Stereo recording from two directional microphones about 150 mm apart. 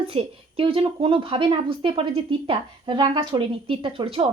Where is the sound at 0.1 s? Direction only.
40° right (ahead or behind).